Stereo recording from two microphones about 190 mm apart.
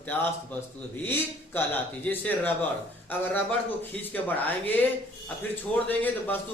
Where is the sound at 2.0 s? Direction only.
10° left (ahead or behind).